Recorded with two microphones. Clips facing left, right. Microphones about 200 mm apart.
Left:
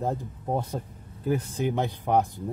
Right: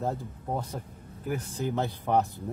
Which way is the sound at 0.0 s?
20° left (ahead or behind).